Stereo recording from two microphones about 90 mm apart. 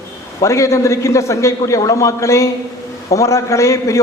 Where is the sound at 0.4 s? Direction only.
35° left (ahead or behind).